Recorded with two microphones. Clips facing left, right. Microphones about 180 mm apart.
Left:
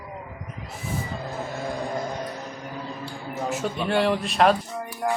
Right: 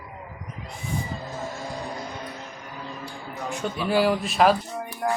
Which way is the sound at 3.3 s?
5° left (ahead or behind).